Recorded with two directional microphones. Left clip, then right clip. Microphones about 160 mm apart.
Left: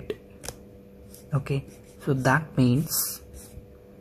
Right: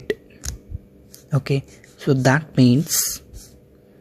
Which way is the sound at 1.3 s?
50° right (ahead or behind).